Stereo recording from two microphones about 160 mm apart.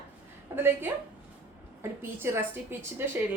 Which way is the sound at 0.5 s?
15° right (ahead or behind).